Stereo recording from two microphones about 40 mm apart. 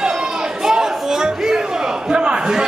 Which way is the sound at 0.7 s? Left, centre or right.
Centre.